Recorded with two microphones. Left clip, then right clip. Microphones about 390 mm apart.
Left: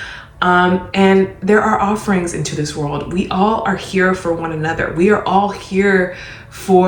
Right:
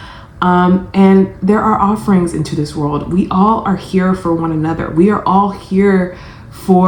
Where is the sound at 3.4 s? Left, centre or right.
Left.